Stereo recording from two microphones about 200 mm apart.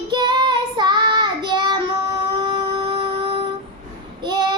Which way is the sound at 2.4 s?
25° right (ahead or behind).